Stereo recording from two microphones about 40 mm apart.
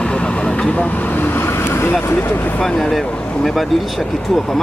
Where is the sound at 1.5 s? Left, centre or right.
Left.